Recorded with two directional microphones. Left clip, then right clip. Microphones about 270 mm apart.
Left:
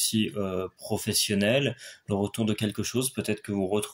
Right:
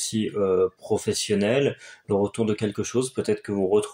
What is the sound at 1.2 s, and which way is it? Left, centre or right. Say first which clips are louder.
Speech: right 1 dB; left.